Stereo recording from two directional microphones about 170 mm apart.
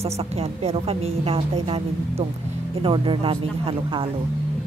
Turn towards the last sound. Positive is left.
turn(degrees=-30)  # may be behind; listen again after turning